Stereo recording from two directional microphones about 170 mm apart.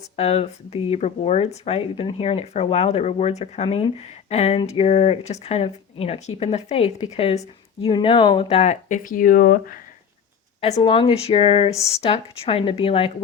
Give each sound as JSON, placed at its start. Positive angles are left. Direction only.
{"t": 0.2, "sound": "speech", "side_deg": 35}
{"t": 10.8, "sound": "speech", "side_deg": 30}